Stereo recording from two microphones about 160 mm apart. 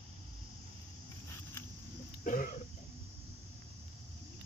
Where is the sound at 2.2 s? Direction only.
55° left (ahead or behind).